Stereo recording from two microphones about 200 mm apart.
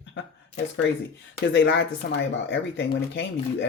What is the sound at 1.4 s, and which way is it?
A man's voice, 65° left (ahead or behind).